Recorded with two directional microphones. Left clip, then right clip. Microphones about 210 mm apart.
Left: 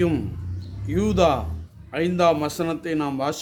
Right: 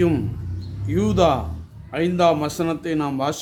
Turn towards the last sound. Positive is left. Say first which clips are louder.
# right 2 dB
turn(degrees=5)  # may be behind; listen again after turning